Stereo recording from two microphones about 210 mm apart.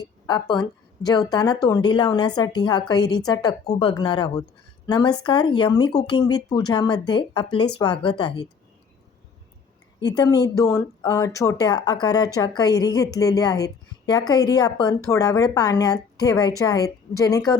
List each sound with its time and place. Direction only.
0.3 s a woman's voice: 20° left (ahead or behind)
10.0 s a woman's voice: 20° left (ahead or behind)